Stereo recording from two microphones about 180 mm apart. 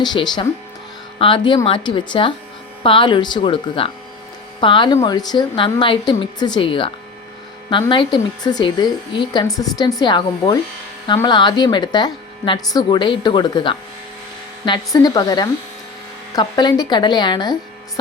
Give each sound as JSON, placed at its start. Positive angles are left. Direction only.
{"t": 0.0, "sound": "speech", "side_deg": 25}